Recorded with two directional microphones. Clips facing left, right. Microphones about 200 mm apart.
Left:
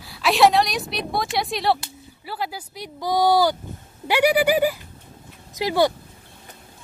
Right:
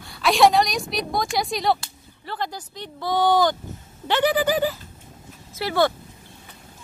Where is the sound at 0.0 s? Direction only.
Centre (ahead or behind).